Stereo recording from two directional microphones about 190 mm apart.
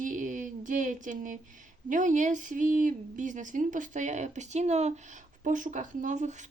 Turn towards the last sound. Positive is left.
turn(degrees=-40)  # may be behind; listen again after turning